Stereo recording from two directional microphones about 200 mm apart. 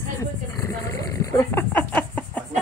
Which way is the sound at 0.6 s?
15° left (ahead or behind).